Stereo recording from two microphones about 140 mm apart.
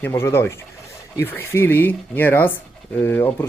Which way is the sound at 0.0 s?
20° left (ahead or behind).